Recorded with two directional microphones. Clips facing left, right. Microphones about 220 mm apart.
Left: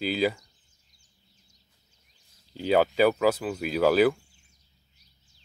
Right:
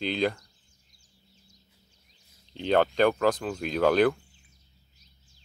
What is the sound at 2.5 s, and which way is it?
Speech, 5° left (ahead or behind).